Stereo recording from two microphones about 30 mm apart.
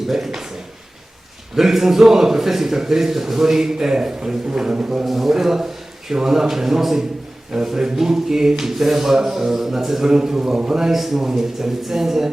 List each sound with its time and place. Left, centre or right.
0.1 s a man's voice: centre
1.5 s a man's voice: centre
5.0 s a man's voice: centre
5.3 s a man's voice: centre
10.1 s a man's voice: right